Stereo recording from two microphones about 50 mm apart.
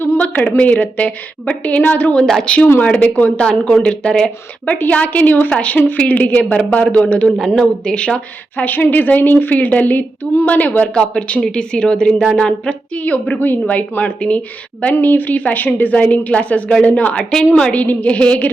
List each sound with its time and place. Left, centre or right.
0.2 s a woman's voice: left
2.1 s a woman's voice: centre
2.4 s a woman's voice: left
3.2 s a woman's voice: centre
4.6 s a woman's voice: left
5.5 s a woman's voice: left
8.6 s a woman's voice: left